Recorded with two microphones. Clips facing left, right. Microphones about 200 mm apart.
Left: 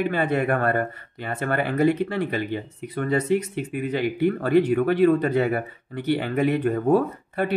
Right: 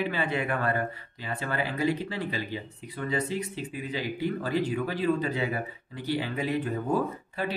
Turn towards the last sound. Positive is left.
turn(degrees=60)  # may be behind; listen again after turning